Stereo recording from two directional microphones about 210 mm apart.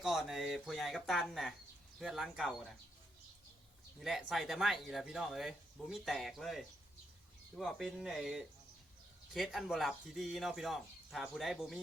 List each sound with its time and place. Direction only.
0.0 s speech: centre (ahead or behind)
4.0 s speech: centre (ahead or behind)